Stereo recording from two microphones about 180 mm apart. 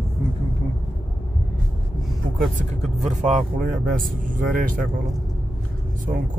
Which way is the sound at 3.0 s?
40° right (ahead or behind).